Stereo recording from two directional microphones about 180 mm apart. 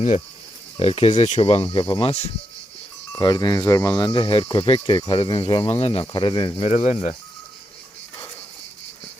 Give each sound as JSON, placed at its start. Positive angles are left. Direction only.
{"t": 0.8, "sound": "speech", "side_deg": 35}
{"t": 3.1, "sound": "speech", "side_deg": 20}